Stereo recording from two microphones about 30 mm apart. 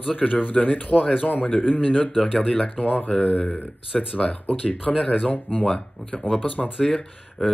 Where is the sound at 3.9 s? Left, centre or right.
Left.